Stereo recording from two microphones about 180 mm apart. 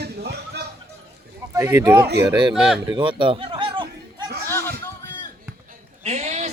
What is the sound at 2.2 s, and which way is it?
Speech, 25° right (ahead or behind).